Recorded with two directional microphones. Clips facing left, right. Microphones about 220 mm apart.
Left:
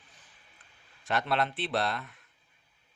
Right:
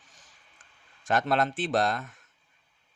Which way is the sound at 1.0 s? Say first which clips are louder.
Right 4 dB; 45° right (ahead or behind).